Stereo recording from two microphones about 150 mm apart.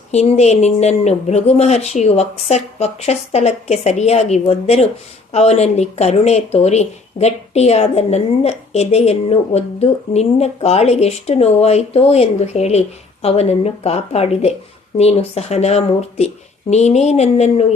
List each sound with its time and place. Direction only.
0.1 s speech: 45° left (ahead or behind)